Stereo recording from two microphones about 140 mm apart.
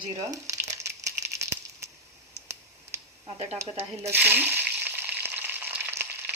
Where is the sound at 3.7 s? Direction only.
15° right (ahead or behind).